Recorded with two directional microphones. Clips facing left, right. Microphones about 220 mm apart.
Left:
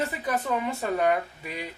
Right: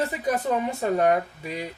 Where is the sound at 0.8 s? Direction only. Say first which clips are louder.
Right 4 dB; 30° right (ahead or behind).